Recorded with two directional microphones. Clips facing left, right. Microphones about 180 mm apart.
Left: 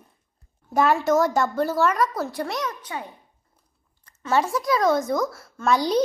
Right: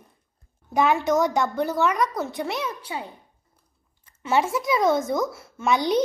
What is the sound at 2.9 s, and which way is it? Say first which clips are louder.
Speech: right 1 dB; 15° right (ahead or behind).